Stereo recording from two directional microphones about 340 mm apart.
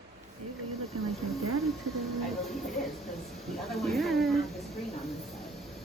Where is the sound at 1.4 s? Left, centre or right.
Right.